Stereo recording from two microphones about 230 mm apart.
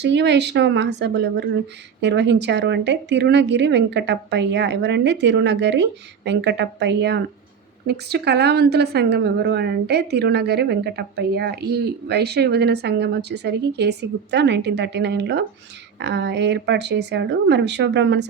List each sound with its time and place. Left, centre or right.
0.0 s a woman's voice: right